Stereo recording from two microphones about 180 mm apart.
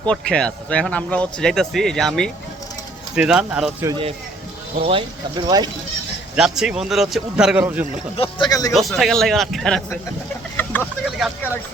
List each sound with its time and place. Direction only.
0.1 s a man's voice: 5° left (ahead or behind)
3.8 s speech: 25° right (ahead or behind)
6.3 s a man's voice: 5° right (ahead or behind)
8.1 s speech: 30° left (ahead or behind)
8.7 s a man's voice: centre (ahead or behind)
10.6 s vehicle: 10° left (ahead or behind)